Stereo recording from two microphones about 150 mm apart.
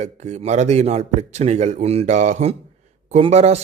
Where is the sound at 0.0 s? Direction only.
50° right (ahead or behind).